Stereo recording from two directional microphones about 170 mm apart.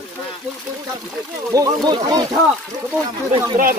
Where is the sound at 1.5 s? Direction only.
20° right (ahead or behind).